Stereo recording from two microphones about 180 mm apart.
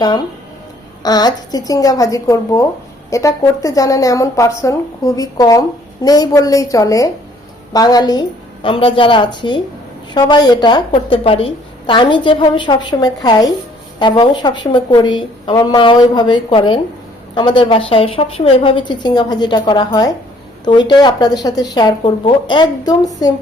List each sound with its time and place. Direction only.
1.0 s speech: 20° left (ahead or behind)